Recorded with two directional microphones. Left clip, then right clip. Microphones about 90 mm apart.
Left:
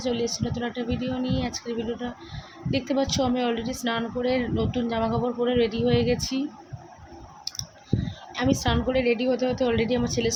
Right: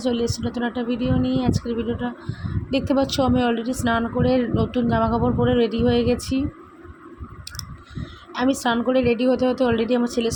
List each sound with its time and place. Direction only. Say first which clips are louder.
0.0 s speech: right 3 dB; 45° right (ahead or behind)
8.3 s speech: right 4 dB; 45° right (ahead or behind)